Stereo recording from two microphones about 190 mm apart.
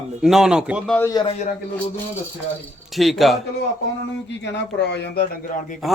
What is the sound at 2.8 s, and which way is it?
Speech, centre (ahead or behind).